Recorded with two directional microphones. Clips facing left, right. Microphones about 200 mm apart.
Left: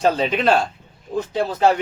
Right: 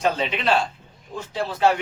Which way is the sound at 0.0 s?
40° left (ahead or behind).